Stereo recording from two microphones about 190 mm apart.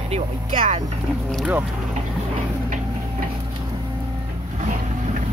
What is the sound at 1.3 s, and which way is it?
Speech, 5° right (ahead or behind).